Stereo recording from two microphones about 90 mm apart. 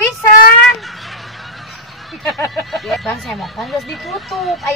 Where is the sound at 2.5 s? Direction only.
Centre (ahead or behind).